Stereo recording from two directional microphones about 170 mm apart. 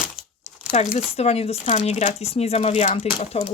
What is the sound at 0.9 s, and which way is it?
Speech, 40° left (ahead or behind).